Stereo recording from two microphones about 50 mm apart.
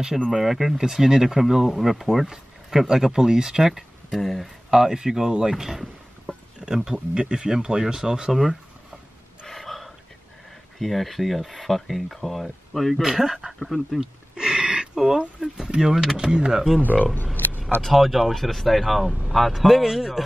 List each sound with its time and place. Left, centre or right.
0.3 s speech: centre
4.2 s speech: centre
4.6 s speech: centre
9.5 s gasp: centre
10.8 s speech: centre
13.0 s speech: centre
13.5 s speech: centre
14.3 s a sound: centre
15.0 s speech: centre
16.8 s speech: left
17.8 s speech: centre